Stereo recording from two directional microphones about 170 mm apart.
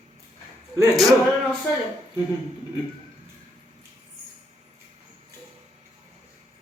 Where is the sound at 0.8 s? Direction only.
20° right (ahead or behind).